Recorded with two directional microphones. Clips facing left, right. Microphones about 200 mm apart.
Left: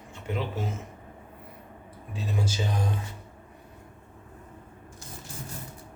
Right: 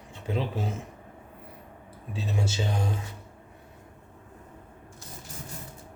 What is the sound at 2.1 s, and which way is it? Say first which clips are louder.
Speech: even; 25° right (ahead or behind).